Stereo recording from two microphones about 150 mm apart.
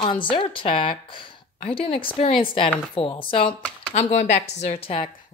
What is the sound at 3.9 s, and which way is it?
Speech, 55° left (ahead or behind).